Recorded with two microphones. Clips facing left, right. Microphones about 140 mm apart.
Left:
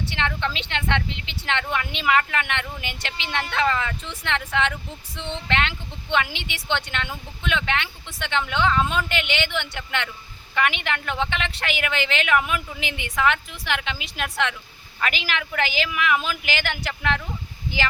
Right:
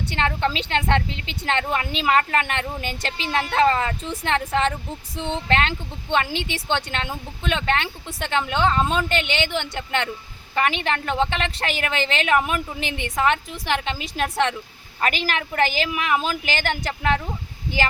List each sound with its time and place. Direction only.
0.2 s a woman's voice: 40° right (ahead or behind)